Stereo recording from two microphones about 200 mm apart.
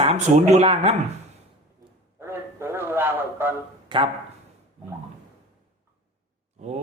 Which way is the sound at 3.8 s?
25° right (ahead or behind).